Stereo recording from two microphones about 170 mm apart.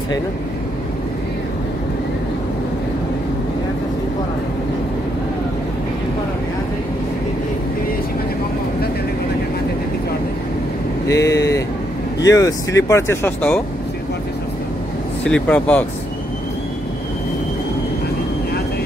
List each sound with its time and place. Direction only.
11.1 s vehicle: 20° left (ahead or behind)
12.3 s speech: 20° left (ahead or behind)
15.2 s speech: 5° left (ahead or behind)